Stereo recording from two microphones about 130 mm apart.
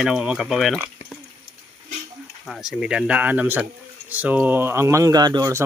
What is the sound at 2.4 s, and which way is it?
Speech, centre (ahead or behind).